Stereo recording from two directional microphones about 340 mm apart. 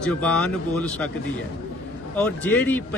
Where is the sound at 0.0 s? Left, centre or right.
Centre.